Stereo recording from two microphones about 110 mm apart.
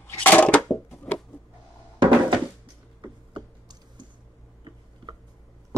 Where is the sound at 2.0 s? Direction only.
50° right (ahead or behind).